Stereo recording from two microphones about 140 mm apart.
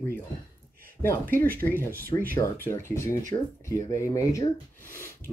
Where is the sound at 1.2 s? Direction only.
90° right.